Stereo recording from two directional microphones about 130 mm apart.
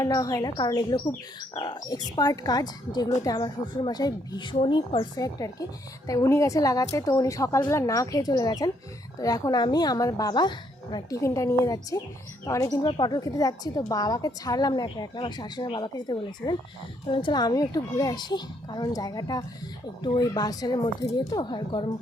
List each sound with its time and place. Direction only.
0.0 s a woman's voice: 25° left (ahead or behind); by 5.0 s 45° left (ahead or behind)
5.1 s a woman's voice: 25° left (ahead or behind)